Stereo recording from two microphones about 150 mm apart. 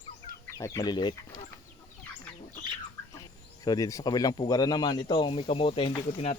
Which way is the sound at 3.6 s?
25° left (ahead or behind).